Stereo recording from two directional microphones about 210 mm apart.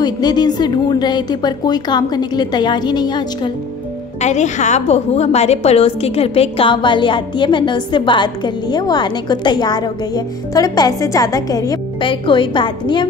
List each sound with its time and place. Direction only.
0.0 s a woman's voice: 20° left (ahead or behind)
4.2 s a woman's voice: 35° left (ahead or behind)